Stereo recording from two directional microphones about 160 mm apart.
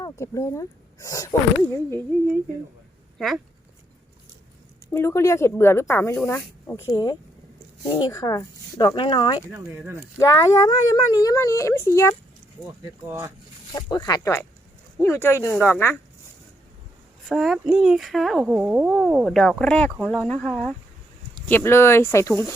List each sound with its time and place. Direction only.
0.0 s speech: 20° left (ahead or behind)
3.2 s speech: centre (ahead or behind)
4.9 s speech: 15° left (ahead or behind)
9.5 s speech: 15° right (ahead or behind)
10.2 s speech: 20° left (ahead or behind)
12.8 s speech: 15° right (ahead or behind)
13.9 s speech: 25° left (ahead or behind)
17.2 s speech: centre (ahead or behind)
21.5 s speech: 15° left (ahead or behind)